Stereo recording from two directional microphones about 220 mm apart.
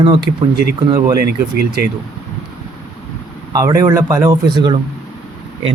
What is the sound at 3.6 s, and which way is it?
Speech, 15° right (ahead or behind).